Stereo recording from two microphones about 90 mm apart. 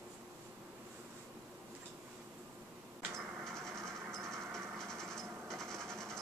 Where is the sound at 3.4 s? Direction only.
5° left (ahead or behind).